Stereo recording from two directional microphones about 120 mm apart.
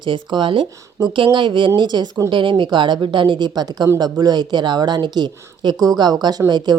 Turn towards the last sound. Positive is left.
turn(degrees=-40)  # may be behind; listen again after turning